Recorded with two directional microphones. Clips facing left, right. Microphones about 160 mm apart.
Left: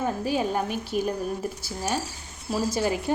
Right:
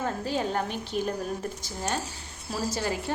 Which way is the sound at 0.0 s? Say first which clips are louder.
Left 3 dB; 10° left (ahead or behind).